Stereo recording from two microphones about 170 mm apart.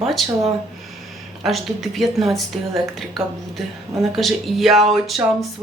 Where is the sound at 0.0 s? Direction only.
Centre (ahead or behind).